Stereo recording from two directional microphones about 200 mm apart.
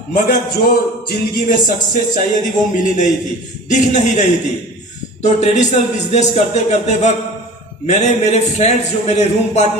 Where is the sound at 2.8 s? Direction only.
40° left (ahead or behind).